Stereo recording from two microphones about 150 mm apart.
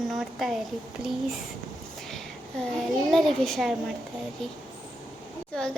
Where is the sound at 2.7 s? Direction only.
Centre (ahead or behind).